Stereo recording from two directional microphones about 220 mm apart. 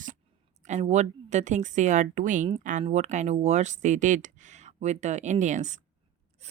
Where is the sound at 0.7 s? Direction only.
30° right (ahead or behind).